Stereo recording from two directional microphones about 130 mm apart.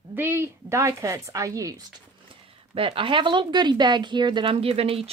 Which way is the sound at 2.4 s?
45° right (ahead or behind).